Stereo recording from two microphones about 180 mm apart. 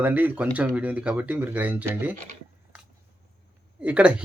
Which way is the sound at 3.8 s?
5° right (ahead or behind).